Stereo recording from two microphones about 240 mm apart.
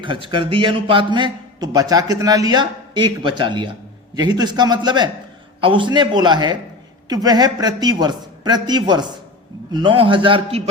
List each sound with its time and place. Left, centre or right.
0.0 s a man's voice: right